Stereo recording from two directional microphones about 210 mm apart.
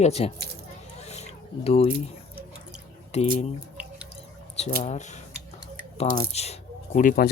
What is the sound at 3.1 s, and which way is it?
Speech, 30° left (ahead or behind).